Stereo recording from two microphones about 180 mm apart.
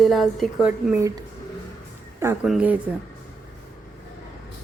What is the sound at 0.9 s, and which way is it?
Speech, 15° right (ahead or behind).